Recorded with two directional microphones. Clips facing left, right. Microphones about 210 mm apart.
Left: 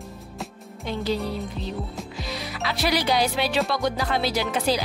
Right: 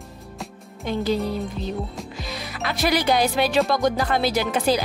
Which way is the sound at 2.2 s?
50° right (ahead or behind).